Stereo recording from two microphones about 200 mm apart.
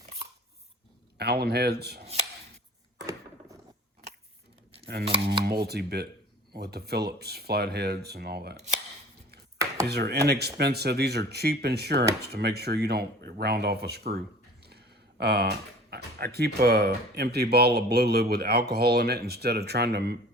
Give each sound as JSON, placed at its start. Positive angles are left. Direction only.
{"t": 1.2, "sound": "speech", "side_deg": -55}
{"t": 5.0, "sound": "dishes", "side_deg": -25}
{"t": 5.5, "sound": "speech", "side_deg": -55}
{"t": 9.8, "sound": "speech", "side_deg": -55}